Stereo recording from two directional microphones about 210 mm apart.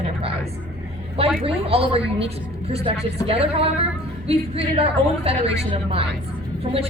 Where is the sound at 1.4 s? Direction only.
25° right (ahead or behind).